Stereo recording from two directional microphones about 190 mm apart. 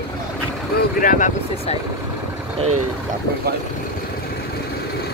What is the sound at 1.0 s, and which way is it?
Speech, 40° left (ahead or behind).